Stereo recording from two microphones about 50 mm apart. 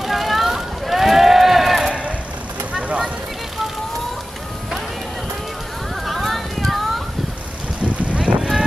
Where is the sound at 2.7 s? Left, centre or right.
Right.